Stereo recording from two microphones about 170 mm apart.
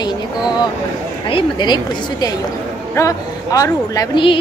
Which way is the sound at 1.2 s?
30° left (ahead or behind).